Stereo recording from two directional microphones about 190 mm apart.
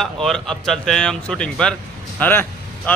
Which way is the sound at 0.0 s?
Centre (ahead or behind).